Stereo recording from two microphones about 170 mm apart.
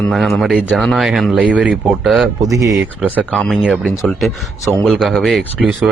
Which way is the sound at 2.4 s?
20° right (ahead or behind).